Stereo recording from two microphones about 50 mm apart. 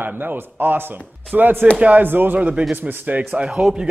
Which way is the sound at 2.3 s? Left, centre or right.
Right.